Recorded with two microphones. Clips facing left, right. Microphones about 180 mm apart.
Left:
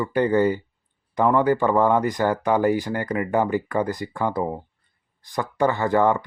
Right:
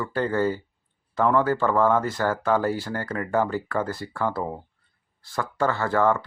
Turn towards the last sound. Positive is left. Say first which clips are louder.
# left 2 dB
turn(degrees=15)  # may be behind; listen again after turning